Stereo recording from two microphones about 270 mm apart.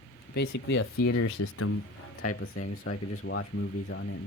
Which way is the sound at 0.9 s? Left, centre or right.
Left.